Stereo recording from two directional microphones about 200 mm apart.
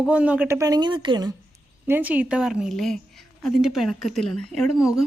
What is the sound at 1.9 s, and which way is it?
A woman's voice, 10° right (ahead or behind).